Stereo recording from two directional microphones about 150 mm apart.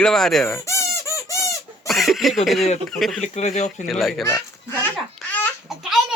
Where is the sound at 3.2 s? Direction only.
50° left (ahead or behind).